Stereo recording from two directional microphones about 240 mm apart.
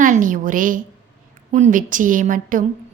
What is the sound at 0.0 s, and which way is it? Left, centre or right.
A woman's voice, right.